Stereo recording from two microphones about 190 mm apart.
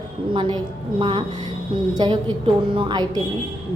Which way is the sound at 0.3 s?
25° right (ahead or behind).